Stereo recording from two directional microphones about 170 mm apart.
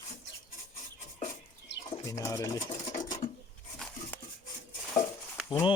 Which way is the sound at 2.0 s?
20° left (ahead or behind).